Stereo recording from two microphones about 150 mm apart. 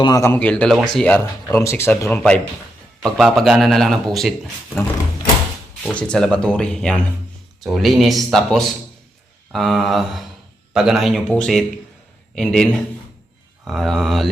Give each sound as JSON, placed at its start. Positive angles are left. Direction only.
{"t": 0.0, "sound": "speech", "side_deg": 20}
{"t": 0.3, "sound": "speech", "side_deg": 10}
{"t": 5.8, "sound": "speech", "side_deg": 5}